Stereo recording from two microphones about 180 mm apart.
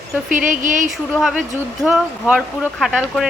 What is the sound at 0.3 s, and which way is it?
Speech, 45° right (ahead or behind).